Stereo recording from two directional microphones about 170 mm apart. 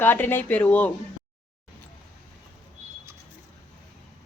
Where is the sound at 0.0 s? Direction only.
10° left (ahead or behind).